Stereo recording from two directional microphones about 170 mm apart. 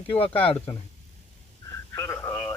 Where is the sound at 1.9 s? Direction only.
20° left (ahead or behind).